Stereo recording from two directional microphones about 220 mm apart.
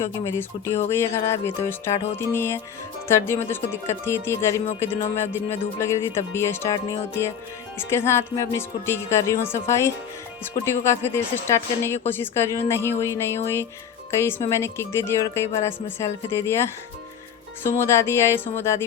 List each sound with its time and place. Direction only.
0.3 s speech: 10° left (ahead or behind)
4.6 s speech: 25° left (ahead or behind)
5.1 s speech: 10° left (ahead or behind)
7.8 s speech: 10° left (ahead or behind)
17.7 s speech: 10° left (ahead or behind)